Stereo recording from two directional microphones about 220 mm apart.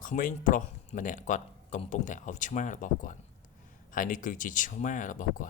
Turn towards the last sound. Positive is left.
turn(degrees=40)  # may be behind; listen again after turning